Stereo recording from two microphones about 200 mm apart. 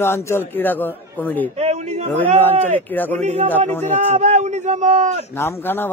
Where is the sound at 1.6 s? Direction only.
30° right (ahead or behind).